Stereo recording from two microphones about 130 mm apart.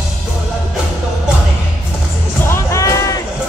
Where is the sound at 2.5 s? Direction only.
20° left (ahead or behind).